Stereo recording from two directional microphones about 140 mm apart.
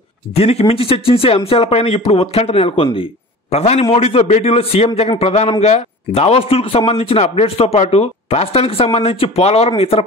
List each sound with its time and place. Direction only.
0.3 s a man's voice: 45° left (ahead or behind)